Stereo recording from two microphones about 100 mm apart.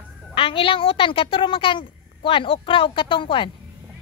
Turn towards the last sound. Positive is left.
turn(degrees=60)  # may be behind; listen again after turning